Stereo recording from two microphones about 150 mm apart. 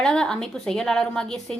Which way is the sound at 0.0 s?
5° left (ahead or behind).